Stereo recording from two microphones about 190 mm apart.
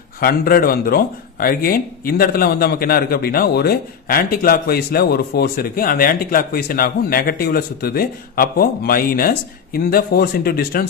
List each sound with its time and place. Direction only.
0.2 s speech: 50° left (ahead or behind)